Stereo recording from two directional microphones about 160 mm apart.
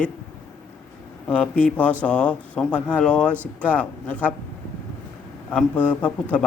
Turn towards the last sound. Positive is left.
turn(degrees=10)  # may be behind; listen again after turning